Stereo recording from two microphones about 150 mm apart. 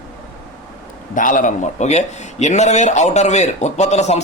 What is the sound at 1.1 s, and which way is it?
A man's voice, 60° left (ahead or behind).